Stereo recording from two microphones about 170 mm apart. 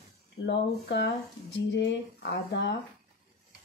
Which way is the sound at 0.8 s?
90° left.